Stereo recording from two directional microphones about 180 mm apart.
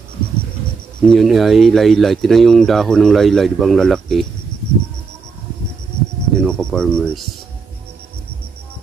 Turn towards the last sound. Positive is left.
turn(degrees=5)  # may be behind; listen again after turning